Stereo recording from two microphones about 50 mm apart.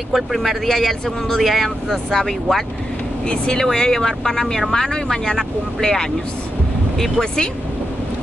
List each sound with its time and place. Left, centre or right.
0.1 s speech: centre
3.3 s speech: centre